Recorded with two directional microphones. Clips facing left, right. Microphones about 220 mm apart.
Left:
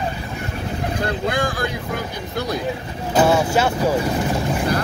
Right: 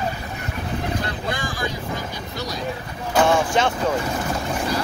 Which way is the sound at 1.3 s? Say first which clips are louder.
Left 5 dB; 55° left (ahead or behind).